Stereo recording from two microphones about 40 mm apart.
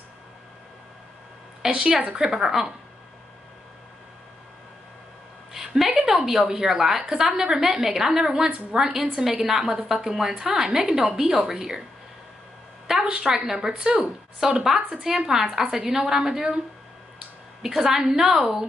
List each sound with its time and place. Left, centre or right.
1.6 s a woman's voice: centre
5.5 s a sound: centre
6.0 s a woman's voice: centre
13.0 s a woman's voice: right